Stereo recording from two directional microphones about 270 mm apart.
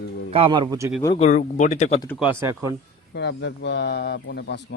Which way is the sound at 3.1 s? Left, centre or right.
Left.